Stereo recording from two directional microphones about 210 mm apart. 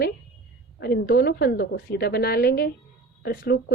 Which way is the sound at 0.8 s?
50° left (ahead or behind).